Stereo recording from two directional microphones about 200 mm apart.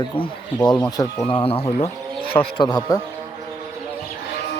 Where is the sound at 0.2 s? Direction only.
20° left (ahead or behind).